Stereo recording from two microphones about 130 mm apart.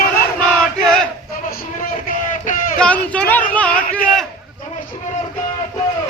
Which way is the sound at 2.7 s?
10° left (ahead or behind).